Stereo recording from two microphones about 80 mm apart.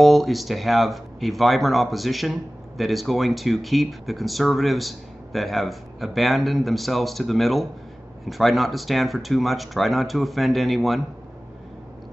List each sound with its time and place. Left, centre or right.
0.0 s speech: centre